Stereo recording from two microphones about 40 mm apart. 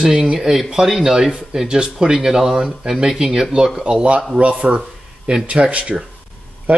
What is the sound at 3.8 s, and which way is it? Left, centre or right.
Speech, right.